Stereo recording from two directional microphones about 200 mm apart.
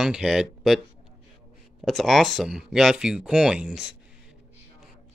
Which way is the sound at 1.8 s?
Centre (ahead or behind).